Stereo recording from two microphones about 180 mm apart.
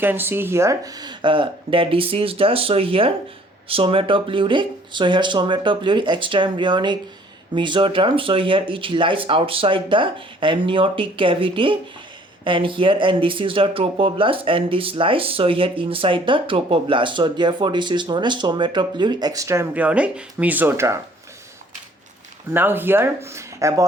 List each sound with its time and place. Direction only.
0.0 s speech: 10° right (ahead or behind)
22.5 s speech: 10° right (ahead or behind)